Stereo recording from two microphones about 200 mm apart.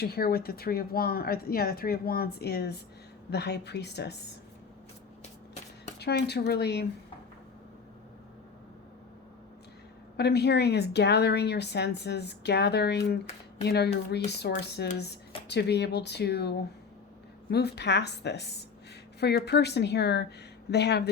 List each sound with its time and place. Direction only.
0.0 s speech: 50° left (ahead or behind)
6.0 s speech: 55° left (ahead or behind)
10.2 s speech: 55° left (ahead or behind)